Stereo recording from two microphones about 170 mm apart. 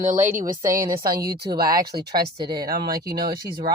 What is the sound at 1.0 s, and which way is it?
Speech, 60° right (ahead or behind).